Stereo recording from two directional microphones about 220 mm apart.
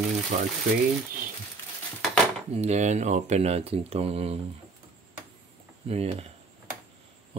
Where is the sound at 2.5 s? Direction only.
30° right (ahead or behind).